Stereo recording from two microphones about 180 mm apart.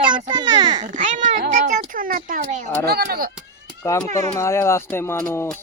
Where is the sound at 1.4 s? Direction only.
55° right (ahead or behind).